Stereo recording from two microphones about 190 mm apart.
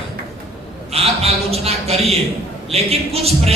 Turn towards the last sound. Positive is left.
turn(degrees=-30)  # may be behind; listen again after turning